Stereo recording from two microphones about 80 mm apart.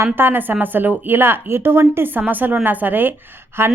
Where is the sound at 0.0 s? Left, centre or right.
Right.